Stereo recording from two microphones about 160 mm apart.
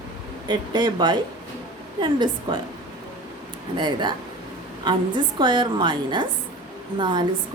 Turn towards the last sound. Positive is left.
turn(degrees=-30)  # may be behind; listen again after turning